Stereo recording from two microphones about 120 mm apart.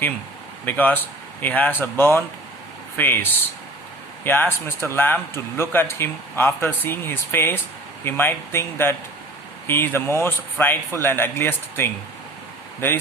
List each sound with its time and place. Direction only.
0.6 s a man's voice: 15° left (ahead or behind)